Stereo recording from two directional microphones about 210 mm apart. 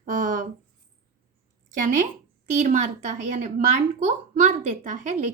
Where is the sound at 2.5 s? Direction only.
35° right (ahead or behind).